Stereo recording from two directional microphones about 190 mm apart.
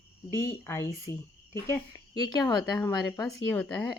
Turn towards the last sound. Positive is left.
turn(degrees=20)  # may be behind; listen again after turning